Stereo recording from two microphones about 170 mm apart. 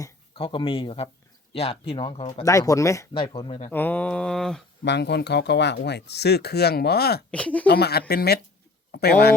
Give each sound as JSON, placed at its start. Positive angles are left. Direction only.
{"t": 0.3, "sound": "speech", "side_deg": 30}
{"t": 2.4, "sound": "mantra", "side_deg": 20}
{"t": 3.2, "sound": "speech", "side_deg": 25}
{"t": 3.7, "sound": "mantra", "side_deg": 10}
{"t": 4.9, "sound": "speech", "side_deg": 85}
{"t": 7.3, "sound": "mantra", "side_deg": 5}
{"t": 7.7, "sound": "a man's voice", "side_deg": 70}